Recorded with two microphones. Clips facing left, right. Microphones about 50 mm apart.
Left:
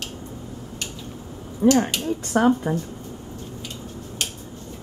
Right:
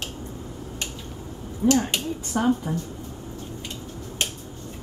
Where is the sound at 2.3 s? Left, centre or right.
Left.